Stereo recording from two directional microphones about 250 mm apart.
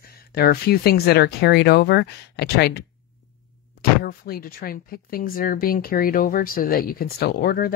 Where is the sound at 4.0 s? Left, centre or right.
Left.